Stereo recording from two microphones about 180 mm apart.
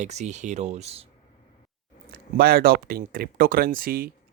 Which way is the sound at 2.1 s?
55° right (ahead or behind).